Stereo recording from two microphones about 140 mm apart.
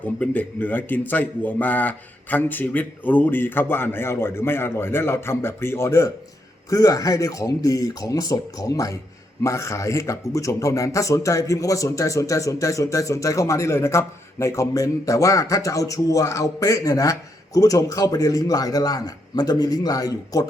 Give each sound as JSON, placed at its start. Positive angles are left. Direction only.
{"t": 0.0, "sound": "a man's voice", "side_deg": 10}